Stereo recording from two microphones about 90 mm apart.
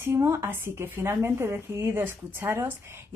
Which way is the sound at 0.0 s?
30° right (ahead or behind).